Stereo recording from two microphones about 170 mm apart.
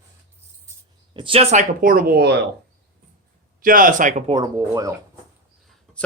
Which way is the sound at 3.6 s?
55° right (ahead or behind).